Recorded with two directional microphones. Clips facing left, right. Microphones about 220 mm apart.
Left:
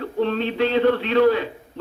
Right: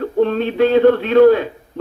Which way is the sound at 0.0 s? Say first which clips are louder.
Right 6 dB; 50° right (ahead or behind).